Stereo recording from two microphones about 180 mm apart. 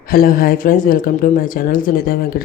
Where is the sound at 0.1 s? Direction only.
55° left (ahead or behind).